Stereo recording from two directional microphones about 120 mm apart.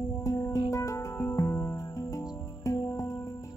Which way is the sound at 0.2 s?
30° left (ahead or behind).